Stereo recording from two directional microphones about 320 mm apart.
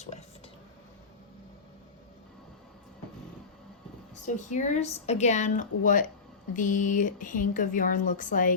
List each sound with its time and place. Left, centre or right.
4.1 s speech: left